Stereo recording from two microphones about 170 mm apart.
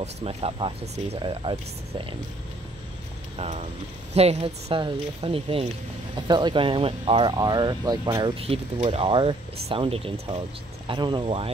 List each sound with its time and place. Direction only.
0.0 s speech: 35° right (ahead or behind)
3.3 s speech: 40° right (ahead or behind)
8.4 s speech: 35° right (ahead or behind)